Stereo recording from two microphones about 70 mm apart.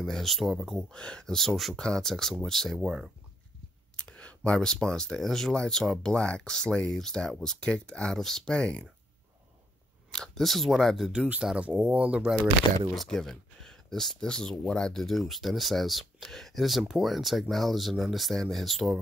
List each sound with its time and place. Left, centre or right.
0.0 s speech: centre
0.9 s speech: centre
3.9 s clicking: centre
4.6 s speech: centre
10.1 s speech: centre
11.5 s speech: centre
12.9 s speech: centre